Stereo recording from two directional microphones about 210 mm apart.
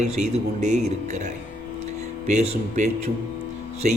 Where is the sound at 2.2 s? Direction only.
30° right (ahead or behind).